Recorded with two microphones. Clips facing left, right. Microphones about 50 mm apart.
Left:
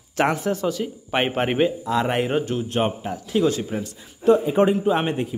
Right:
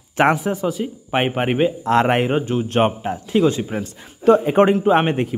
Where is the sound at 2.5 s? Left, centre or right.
Right.